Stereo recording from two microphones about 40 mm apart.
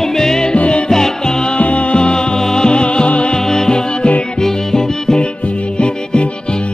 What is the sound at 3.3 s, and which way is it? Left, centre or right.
Music, centre.